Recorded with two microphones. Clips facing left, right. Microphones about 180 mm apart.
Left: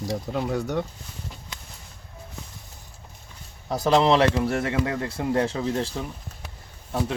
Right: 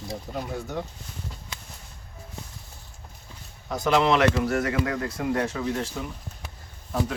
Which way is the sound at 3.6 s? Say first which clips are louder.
Left 2 dB; 35° left (ahead or behind).